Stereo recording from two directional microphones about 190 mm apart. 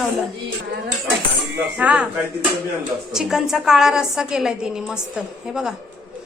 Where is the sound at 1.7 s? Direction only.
5° right (ahead or behind).